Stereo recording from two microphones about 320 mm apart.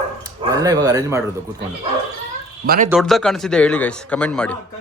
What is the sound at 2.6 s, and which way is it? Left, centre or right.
Speech, right.